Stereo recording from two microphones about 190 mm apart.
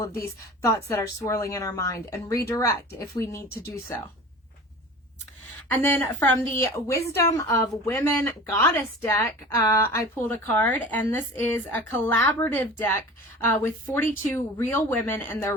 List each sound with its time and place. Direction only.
0.6 s a woman's voice: 15° left (ahead or behind)
3.9 s a woman's voice: 15° left (ahead or behind)
5.6 s a woman's voice: 10° left (ahead or behind)